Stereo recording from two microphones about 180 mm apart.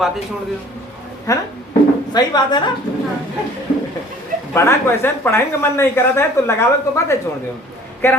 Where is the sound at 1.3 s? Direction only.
20° left (ahead or behind).